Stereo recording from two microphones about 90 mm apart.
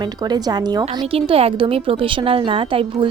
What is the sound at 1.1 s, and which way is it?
A woman's voice, 90° right.